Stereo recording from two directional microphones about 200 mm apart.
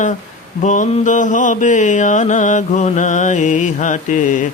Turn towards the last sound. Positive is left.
turn(degrees=40)  # may be behind; listen again after turning